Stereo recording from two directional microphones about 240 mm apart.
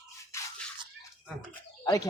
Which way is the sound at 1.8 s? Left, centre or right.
Centre.